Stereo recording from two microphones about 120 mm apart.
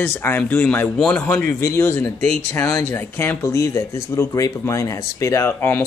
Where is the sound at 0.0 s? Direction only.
20° left (ahead or behind).